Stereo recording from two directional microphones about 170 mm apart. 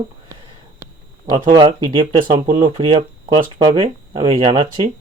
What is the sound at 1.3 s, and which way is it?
Speech, 30° right (ahead or behind).